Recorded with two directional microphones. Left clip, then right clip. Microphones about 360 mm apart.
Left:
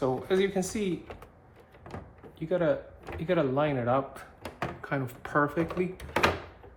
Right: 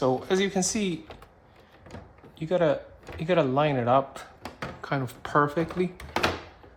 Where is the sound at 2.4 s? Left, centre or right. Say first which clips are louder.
Right 3 dB; right.